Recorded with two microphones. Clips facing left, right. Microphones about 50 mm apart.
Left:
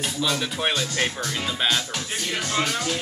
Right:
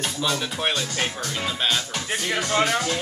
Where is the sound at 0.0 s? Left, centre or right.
Centre.